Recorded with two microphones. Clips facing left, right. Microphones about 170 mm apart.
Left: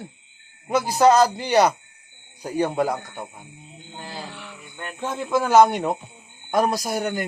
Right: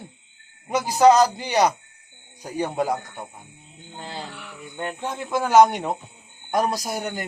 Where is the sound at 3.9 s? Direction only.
20° right (ahead or behind).